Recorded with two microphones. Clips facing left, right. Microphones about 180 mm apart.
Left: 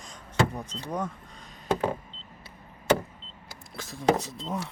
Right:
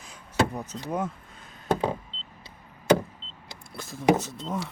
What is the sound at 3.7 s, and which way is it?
Speech, centre (ahead or behind).